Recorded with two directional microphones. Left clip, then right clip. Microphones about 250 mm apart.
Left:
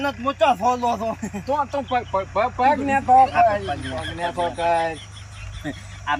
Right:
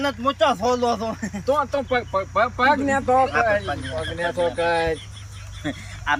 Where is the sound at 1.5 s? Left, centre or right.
Centre.